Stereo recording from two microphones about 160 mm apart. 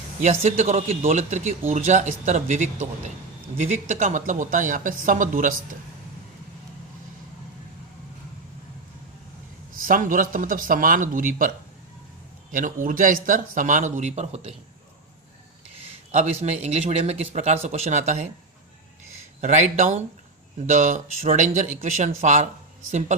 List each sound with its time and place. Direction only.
0.2 s speech: 45° right (ahead or behind)
9.8 s speech: 60° right (ahead or behind); by 14.5 s 45° right (ahead or behind)
15.7 s speech: 40° right (ahead or behind)
19.4 s speech: 50° right (ahead or behind)